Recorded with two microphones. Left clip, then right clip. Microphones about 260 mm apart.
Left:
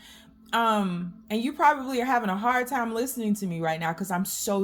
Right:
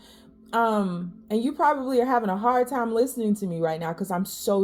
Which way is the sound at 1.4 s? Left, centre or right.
Left.